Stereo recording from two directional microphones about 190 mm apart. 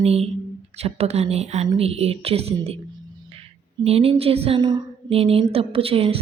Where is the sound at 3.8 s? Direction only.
30° right (ahead or behind).